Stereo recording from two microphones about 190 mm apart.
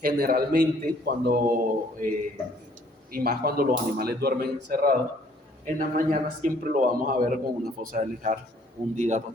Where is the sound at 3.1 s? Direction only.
55° right (ahead or behind).